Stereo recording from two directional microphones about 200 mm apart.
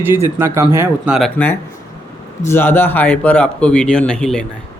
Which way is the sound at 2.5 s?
10° left (ahead or behind).